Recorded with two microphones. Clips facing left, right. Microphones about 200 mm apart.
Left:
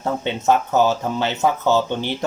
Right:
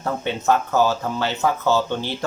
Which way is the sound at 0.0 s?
20° left (ahead or behind).